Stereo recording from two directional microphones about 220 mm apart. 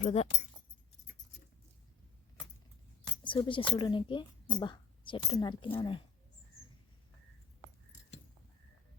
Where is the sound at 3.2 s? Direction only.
20° left (ahead or behind).